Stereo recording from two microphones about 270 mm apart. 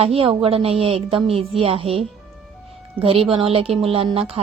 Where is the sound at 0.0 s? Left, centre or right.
Right.